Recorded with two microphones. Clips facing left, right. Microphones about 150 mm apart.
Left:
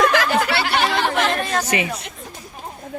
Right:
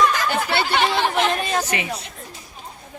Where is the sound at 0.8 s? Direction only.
20° right (ahead or behind).